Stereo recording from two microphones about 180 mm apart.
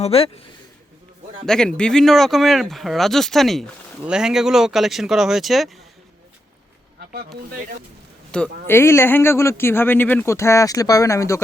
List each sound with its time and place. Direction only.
0.0 s speech: 35° left (ahead or behind)
1.5 s speech: 5° left (ahead or behind)
8.6 s speech: 15° left (ahead or behind)